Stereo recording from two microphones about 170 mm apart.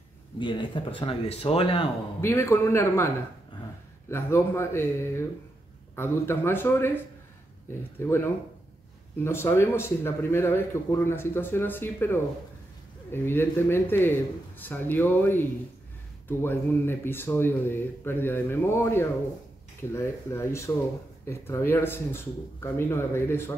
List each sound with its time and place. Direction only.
0.4 s speech: 30° left (ahead or behind)
2.2 s speech: 15° left (ahead or behind)
4.1 s speech: 15° left (ahead or behind)
8.0 s speech: 15° left (ahead or behind)